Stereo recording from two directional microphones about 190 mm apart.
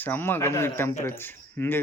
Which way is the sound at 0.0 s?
10° left (ahead or behind).